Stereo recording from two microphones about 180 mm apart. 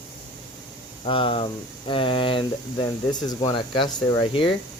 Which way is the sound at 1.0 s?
30° left (ahead or behind).